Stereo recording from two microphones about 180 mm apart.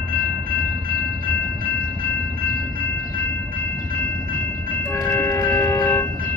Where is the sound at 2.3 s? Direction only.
55° right (ahead or behind).